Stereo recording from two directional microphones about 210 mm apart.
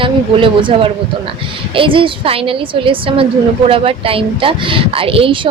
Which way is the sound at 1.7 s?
25° right (ahead or behind).